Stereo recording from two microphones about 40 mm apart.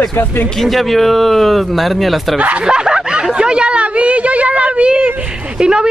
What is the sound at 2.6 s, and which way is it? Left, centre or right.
A woman's voice, right.